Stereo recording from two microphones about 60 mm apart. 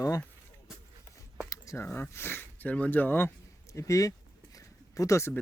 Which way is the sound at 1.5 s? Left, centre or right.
Left.